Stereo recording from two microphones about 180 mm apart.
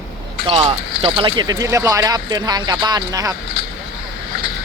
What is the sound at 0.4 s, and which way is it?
Speech, 30° right (ahead or behind).